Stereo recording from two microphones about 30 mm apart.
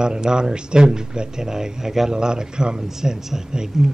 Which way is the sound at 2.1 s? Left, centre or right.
Right.